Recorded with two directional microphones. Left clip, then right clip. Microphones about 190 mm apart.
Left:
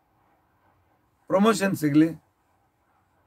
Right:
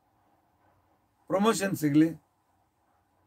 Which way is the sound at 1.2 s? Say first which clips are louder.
Left 5 dB; 5° left (ahead or behind).